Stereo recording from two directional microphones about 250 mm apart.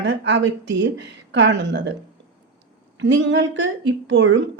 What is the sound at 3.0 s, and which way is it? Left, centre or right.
A woman's voice, right.